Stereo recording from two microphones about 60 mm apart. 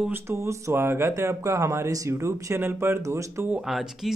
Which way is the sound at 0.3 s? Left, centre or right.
Right.